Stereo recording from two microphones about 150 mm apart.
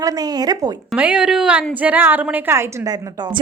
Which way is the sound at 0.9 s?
10° right (ahead or behind).